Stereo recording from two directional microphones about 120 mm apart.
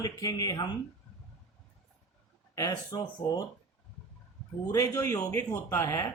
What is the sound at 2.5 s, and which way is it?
Speech, 35° left (ahead or behind).